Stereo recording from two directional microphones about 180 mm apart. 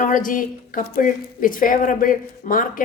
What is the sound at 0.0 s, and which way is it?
A woman's voice, 45° left (ahead or behind).